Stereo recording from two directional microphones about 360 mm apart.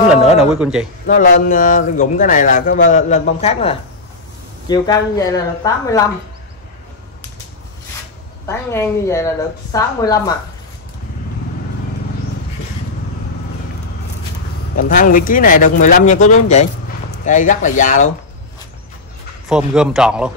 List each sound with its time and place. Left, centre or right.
0.4 s speech: centre
1.0 s speech: left
8.5 s speech: centre
14.8 s speech: left
19.5 s speech: centre